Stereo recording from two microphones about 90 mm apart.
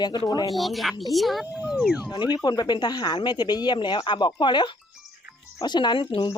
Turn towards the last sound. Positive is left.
turn(degrees=55)  # may be behind; listen again after turning